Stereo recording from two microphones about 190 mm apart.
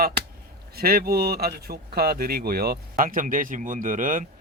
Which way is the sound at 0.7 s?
50° right (ahead or behind).